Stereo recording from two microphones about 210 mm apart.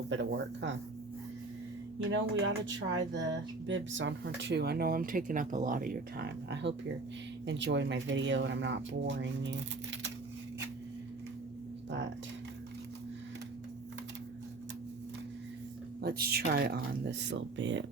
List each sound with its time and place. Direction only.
0.1 s speech: 60° right (ahead or behind)
2.0 s speech: 65° right (ahead or behind)
11.9 s speech: 60° right (ahead or behind)
16.0 s speech: 45° right (ahead or behind); by 17.8 s 60° right (ahead or behind)